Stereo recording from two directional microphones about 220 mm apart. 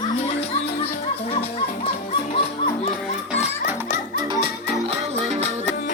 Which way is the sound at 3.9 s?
20° right (ahead or behind).